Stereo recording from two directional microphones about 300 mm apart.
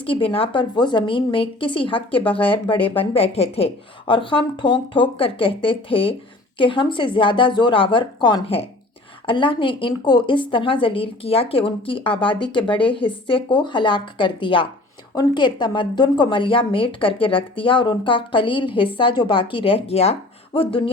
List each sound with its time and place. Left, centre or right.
0.0 s speech: centre